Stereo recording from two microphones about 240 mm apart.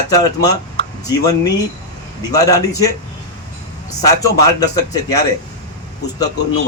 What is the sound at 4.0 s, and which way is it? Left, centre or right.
Speech, centre.